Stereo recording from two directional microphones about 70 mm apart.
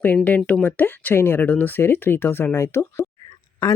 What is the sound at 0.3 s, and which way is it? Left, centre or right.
Speech, centre.